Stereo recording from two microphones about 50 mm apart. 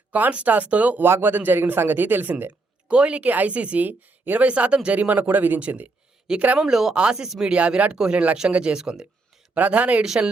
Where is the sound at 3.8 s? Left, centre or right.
Right.